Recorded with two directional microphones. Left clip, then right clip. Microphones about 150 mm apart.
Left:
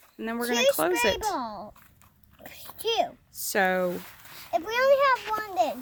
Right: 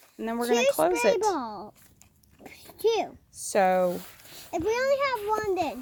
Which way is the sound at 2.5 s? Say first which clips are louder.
Right 4 dB; 55° left (ahead or behind).